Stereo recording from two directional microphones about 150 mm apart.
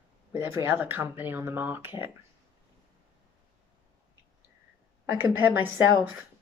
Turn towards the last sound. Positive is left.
turn(degrees=-15)  # may be behind; listen again after turning